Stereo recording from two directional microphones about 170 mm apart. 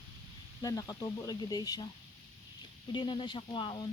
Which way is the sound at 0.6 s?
20° left (ahead or behind).